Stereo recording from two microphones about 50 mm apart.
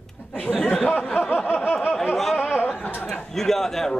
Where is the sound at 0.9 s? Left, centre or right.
Centre.